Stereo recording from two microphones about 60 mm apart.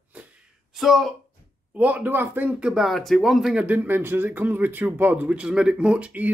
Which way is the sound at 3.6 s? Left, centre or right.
Right.